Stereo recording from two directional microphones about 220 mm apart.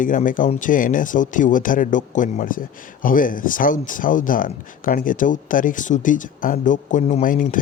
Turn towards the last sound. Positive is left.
turn(degrees=40)  # may be behind; listen again after turning